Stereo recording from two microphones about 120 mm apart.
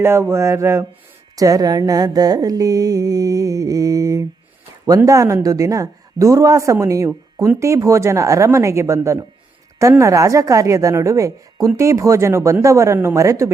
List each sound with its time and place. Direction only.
0.0 s a woman's voice: 20° right (ahead or behind)